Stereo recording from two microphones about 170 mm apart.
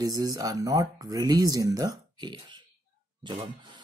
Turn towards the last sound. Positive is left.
turn(degrees=-25)  # may be behind; listen again after turning